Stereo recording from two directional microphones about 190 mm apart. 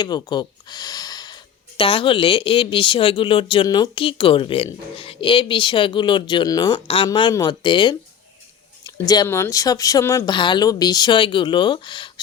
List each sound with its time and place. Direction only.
0.0 s speech: 20° left (ahead or behind)